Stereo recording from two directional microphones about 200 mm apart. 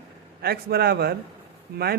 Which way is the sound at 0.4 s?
50° right (ahead or behind).